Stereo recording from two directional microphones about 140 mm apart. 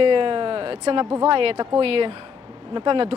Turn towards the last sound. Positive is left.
turn(degrees=-40)  # may be behind; listen again after turning